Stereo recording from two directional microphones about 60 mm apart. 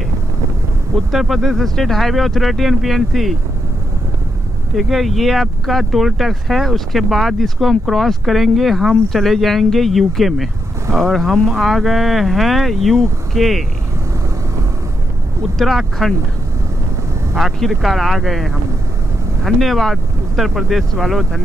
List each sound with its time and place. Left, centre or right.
1.1 s speech: centre
4.7 s speech: centre
15.5 s speech: centre
17.4 s speech: centre